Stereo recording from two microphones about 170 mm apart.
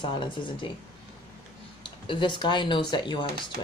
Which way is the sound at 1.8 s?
30° left (ahead or behind).